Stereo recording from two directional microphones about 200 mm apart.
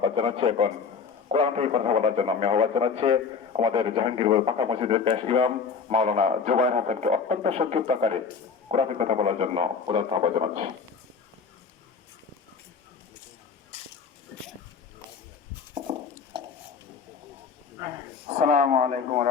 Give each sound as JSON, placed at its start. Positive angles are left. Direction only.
{"t": 0.0, "sound": "speech", "side_deg": -25}
{"t": 18.3, "sound": "speech", "side_deg": -35}